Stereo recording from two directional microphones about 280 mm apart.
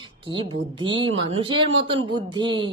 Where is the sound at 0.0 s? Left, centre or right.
Centre.